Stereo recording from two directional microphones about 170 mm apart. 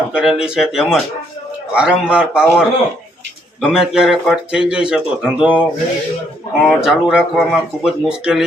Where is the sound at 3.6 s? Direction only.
Centre (ahead or behind).